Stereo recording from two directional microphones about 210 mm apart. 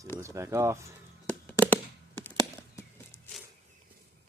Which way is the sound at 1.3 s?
10° left (ahead or behind).